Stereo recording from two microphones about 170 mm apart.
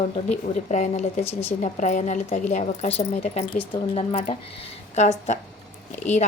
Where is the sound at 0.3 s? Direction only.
45° left (ahead or behind).